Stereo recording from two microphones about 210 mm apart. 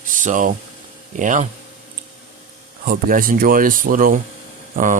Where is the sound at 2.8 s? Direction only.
45° right (ahead or behind).